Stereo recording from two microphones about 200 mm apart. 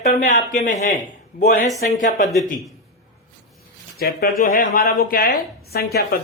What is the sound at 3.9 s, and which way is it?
Speech, 50° left (ahead or behind).